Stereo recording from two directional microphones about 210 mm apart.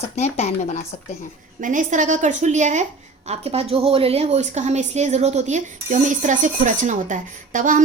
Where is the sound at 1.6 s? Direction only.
40° right (ahead or behind).